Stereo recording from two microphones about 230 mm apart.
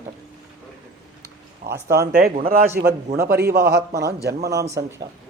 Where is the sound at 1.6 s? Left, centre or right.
Right.